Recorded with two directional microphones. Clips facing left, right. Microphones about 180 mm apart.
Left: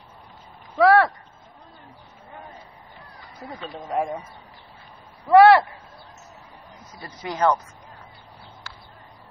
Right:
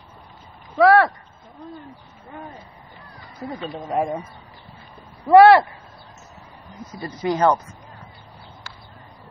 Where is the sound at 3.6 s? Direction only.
15° right (ahead or behind).